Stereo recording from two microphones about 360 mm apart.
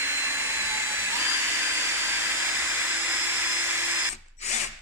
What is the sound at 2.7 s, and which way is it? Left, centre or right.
Vacuum cleaner, centre.